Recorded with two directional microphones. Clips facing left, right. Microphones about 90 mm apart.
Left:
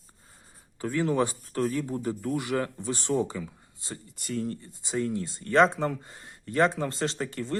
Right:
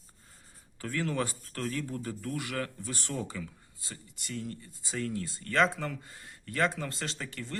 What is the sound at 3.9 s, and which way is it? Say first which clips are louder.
Speech: left 7 dB; 40° left (ahead or behind).